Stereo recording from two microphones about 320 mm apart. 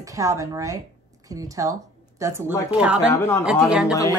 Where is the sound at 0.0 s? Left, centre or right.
Centre.